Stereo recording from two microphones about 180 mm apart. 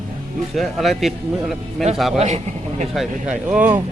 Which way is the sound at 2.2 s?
40° right (ahead or behind).